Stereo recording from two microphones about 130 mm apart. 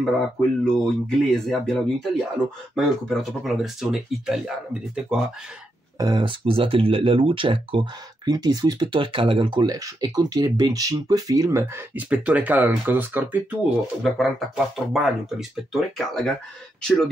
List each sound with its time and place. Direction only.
0.0 s speech: 5° left (ahead or behind)
5.9 s speech: 35° right (ahead or behind); by 13.6 s 15° right (ahead or behind)
14.1 s speech: centre (ahead or behind)